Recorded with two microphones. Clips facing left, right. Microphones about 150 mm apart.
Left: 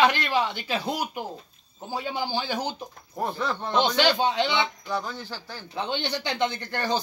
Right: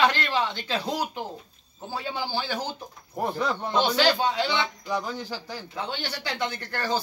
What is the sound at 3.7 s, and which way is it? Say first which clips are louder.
Speech: left 1 dB; 20° left (ahead or behind).